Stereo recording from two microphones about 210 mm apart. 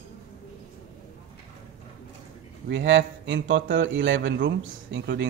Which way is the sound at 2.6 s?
60° right (ahead or behind).